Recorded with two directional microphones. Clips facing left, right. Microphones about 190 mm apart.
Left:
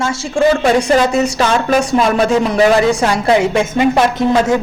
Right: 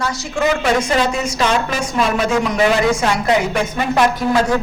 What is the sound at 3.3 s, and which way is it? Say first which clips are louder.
Speech: left 7 dB; 25° left (ahead or behind).